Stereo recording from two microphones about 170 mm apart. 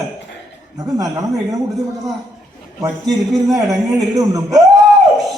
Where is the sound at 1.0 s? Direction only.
20° right (ahead or behind).